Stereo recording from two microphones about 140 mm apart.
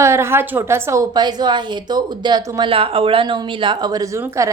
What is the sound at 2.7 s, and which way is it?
Speech, 40° right (ahead or behind).